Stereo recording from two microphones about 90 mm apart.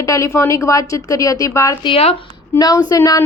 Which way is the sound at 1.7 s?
60° left (ahead or behind).